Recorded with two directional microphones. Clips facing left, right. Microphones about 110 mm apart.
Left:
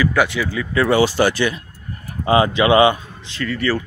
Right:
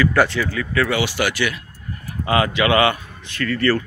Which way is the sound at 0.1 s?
5° left (ahead or behind).